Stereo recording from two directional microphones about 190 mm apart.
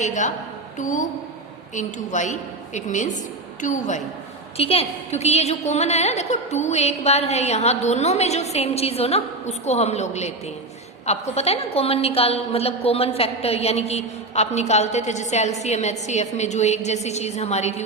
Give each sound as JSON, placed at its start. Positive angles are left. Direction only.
{"t": 0.0, "sound": "a woman's voice", "side_deg": 40}